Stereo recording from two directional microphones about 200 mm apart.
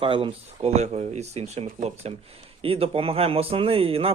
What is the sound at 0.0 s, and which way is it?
Speech, 25° right (ahead or behind).